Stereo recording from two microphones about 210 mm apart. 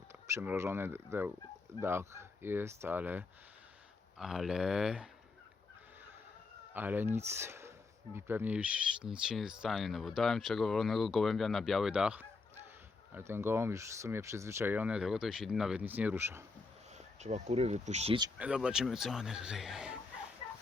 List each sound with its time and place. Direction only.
0.1 s speech: 10° right (ahead or behind)
6.7 s speech: 10° right (ahead or behind)
17.0 s speech: 30° right (ahead or behind)
18.3 s speech: 5° right (ahead or behind)